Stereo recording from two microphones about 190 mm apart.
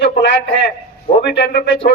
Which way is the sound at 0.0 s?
60° left (ahead or behind).